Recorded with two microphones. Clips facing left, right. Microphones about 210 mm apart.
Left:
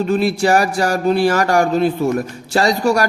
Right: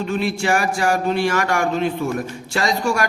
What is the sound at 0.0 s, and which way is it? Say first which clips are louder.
A man's voice: left 6 dB; 35° left (ahead or behind).